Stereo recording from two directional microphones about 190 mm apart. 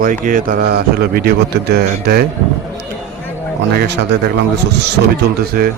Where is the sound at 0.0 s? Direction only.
45° right (ahead or behind).